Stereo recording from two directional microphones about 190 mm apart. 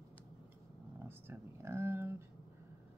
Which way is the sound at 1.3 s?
15° right (ahead or behind).